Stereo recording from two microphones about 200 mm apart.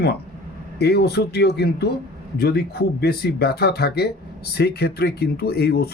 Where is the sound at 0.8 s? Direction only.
55° left (ahead or behind).